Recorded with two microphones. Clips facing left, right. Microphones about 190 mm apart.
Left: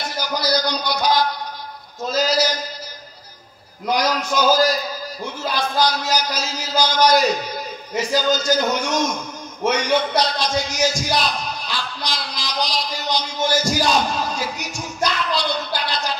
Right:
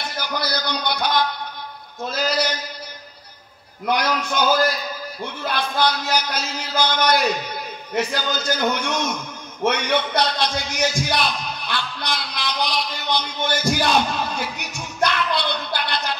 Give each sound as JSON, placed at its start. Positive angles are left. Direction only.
{"t": 0.2, "sound": "music", "side_deg": -60}
{"t": 2.0, "sound": "a sound", "side_deg": -60}
{"t": 3.9, "sound": "a man's voice", "side_deg": -60}